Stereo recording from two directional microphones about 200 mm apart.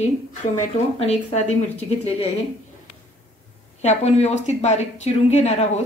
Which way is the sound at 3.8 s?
30° left (ahead or behind).